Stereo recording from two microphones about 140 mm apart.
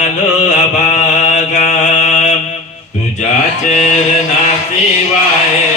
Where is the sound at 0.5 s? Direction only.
60° left (ahead or behind).